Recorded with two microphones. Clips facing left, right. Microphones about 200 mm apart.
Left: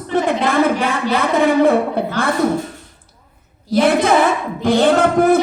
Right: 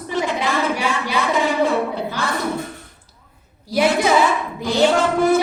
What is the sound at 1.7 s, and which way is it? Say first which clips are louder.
Speech: left 5 dB; 55° left (ahead or behind).